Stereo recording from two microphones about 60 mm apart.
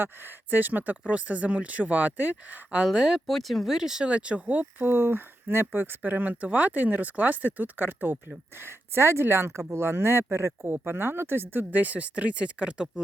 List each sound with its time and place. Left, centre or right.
0.5 s speech: right
2.8 s speech: centre
3.2 s speech: centre
3.8 s speech: centre; by 4.9 s right
4.9 s speech: right
8.6 s speech: right; by 12.9 s centre